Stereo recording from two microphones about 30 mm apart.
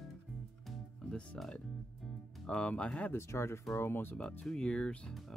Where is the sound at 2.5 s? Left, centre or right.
Left.